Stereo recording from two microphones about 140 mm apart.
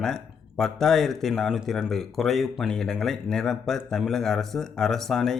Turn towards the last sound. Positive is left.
turn(degrees=5)  # may be behind; listen again after turning